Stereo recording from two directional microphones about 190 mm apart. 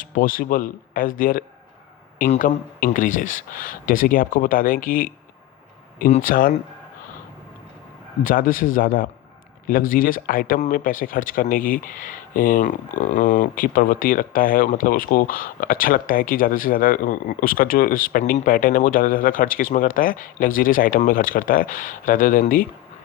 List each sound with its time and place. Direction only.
0.0 s speech: 45° left (ahead or behind)
8.2 s speech: 45° left (ahead or behind)